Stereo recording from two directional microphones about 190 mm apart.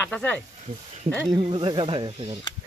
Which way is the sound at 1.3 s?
25° right (ahead or behind).